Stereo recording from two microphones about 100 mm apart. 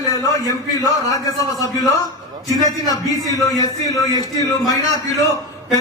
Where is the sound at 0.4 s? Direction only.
35° left (ahead or behind).